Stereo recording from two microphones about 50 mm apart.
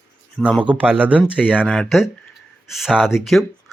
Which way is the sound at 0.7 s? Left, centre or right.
Right.